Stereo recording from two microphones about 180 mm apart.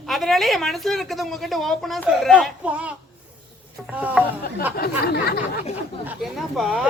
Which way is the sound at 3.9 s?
10° right (ahead or behind).